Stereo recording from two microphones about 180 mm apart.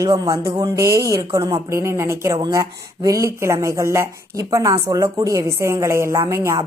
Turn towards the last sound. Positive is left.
turn(degrees=-15)  # may be behind; listen again after turning